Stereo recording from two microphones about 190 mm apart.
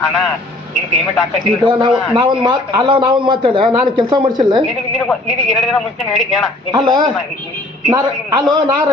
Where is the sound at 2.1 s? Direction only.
25° right (ahead or behind).